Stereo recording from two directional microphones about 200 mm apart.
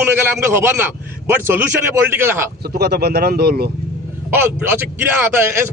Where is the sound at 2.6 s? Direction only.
50° right (ahead or behind).